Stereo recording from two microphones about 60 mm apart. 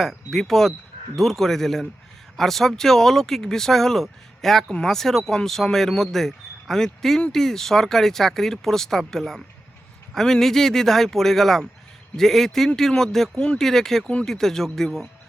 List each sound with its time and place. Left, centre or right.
0.0 s speech: centre
13.3 s speech: centre
13.6 s speech: centre